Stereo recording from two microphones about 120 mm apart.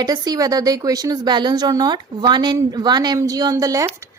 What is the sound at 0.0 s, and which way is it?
A woman's voice, 35° right (ahead or behind).